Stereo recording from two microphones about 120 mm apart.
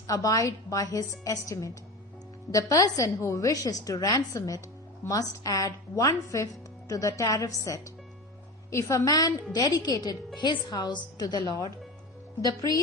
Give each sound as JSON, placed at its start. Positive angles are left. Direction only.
{"t": 0.1, "sound": "a woman's voice", "side_deg": 30}